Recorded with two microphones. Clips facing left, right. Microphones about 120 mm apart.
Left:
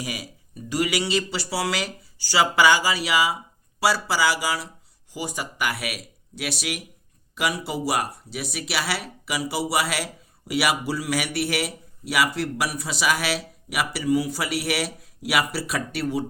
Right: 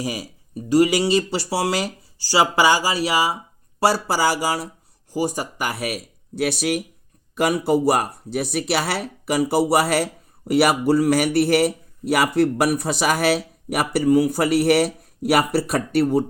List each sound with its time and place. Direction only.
0.0 s speech: 40° right (ahead or behind)
3.8 s a man's voice: 50° right (ahead or behind)